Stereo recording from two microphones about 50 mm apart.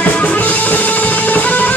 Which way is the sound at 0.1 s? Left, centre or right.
Left.